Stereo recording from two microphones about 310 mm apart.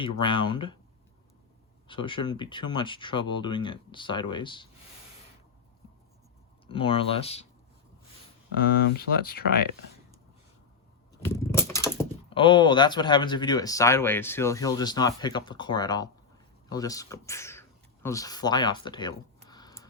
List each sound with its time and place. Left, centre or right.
0.0 s speech: centre
1.9 s speech: centre
6.7 s speech: centre
8.9 s speech: left
11.2 s speech: centre